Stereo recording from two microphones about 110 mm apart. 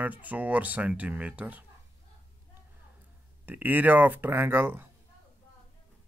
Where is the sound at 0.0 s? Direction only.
15° right (ahead or behind).